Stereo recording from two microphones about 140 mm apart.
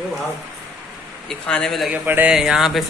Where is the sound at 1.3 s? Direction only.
5° left (ahead or behind).